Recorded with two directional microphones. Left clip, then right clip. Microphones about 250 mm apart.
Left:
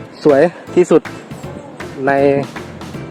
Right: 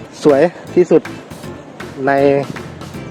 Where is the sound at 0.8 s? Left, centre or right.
Centre.